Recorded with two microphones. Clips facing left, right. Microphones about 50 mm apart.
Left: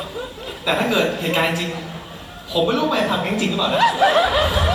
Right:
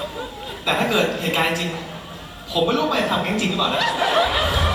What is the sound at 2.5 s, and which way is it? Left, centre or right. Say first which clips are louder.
Speech: left 1 dB; centre.